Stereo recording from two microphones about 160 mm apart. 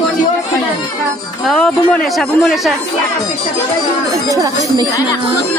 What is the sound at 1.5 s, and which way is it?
Speech, 5° left (ahead or behind).